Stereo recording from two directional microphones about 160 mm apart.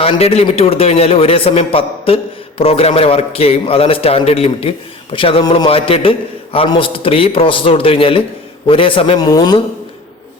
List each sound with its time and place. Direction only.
0.0 s a man's voice: 35° left (ahead or behind)